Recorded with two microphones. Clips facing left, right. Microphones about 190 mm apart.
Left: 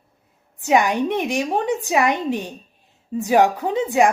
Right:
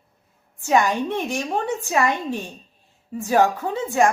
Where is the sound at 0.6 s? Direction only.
15° left (ahead or behind).